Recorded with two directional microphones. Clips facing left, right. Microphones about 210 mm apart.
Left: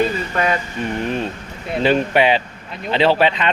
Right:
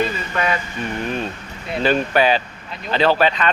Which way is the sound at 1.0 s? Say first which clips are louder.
Left 2 dB; 25° left (ahead or behind).